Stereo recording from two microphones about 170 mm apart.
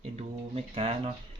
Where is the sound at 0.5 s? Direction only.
35° right (ahead or behind).